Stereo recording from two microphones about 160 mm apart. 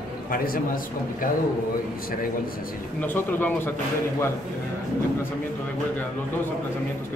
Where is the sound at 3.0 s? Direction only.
10° left (ahead or behind).